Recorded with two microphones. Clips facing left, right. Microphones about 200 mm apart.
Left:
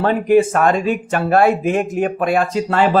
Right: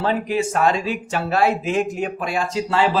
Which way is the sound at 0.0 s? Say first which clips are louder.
Left 8 dB; 55° left (ahead or behind).